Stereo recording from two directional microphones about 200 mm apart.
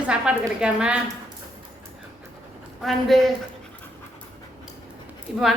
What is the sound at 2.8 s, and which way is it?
Speech, centre (ahead or behind).